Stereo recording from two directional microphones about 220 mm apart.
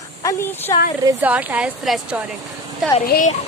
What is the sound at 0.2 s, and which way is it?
Speech, 15° left (ahead or behind).